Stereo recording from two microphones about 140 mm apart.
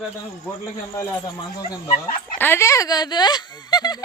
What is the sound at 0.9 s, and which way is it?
Speech, 25° left (ahead or behind).